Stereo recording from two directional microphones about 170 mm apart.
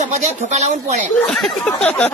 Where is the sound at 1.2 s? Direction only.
5° left (ahead or behind).